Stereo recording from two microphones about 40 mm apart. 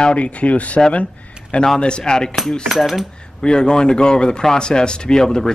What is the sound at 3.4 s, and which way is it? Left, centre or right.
Speech, centre.